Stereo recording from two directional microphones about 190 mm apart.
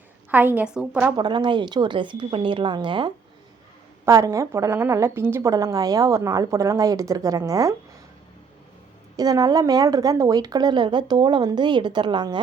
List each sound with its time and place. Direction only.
0.3 s a woman's voice: 10° right (ahead or behind)
1.1 s a woman's voice: 25° right (ahead or behind)
9.1 s a woman's voice: 20° right (ahead or behind)